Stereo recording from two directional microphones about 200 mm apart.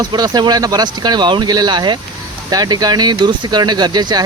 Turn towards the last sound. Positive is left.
turn(degrees=-20)  # may be behind; listen again after turning